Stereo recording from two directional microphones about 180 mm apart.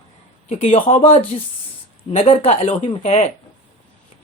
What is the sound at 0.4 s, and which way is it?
Speech, 35° left (ahead or behind).